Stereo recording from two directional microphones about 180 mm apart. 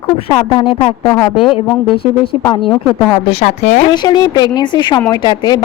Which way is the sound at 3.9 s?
25° left (ahead or behind).